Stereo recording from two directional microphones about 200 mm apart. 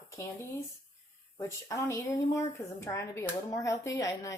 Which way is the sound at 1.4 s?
15° left (ahead or behind).